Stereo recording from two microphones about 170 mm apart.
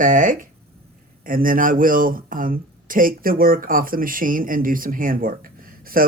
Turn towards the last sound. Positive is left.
turn(degrees=-55)  # may be behind; listen again after turning